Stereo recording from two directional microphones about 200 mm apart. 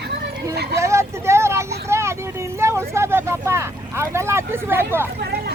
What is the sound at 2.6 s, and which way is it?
Speech, 15° right (ahead or behind).